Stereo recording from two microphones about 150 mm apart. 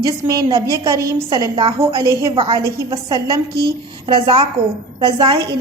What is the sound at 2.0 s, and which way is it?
A woman's voice, 20° right (ahead or behind).